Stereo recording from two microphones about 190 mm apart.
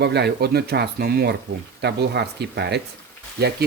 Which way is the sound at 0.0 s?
60° right (ahead or behind).